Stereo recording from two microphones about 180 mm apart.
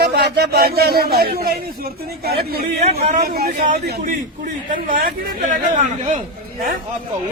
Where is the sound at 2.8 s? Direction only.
40° right (ahead or behind).